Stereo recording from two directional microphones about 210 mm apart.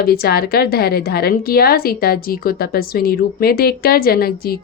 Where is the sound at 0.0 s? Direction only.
45° left (ahead or behind).